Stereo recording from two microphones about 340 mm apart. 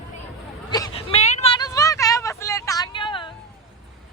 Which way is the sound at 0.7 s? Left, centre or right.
Centre.